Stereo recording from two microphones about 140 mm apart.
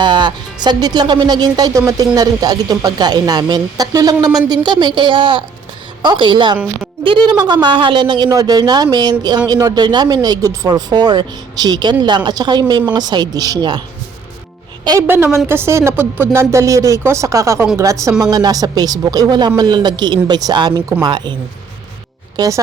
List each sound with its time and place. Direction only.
0.0 s speech: 35° right (ahead or behind)
15.0 s a woman's voice: 15° right (ahead or behind); by 21.3 s 30° right (ahead or behind)
22.4 s speech: 25° right (ahead or behind)